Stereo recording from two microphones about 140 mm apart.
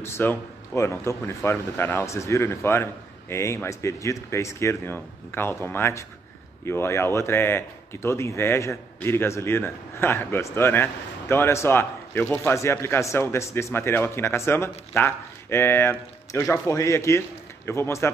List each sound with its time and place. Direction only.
0.0 s speech: 15° left (ahead or behind)